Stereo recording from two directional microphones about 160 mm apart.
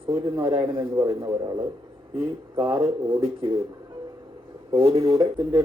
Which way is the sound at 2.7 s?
15° right (ahead or behind).